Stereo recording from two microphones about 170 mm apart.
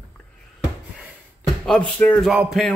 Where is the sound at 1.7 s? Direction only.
5° left (ahead or behind).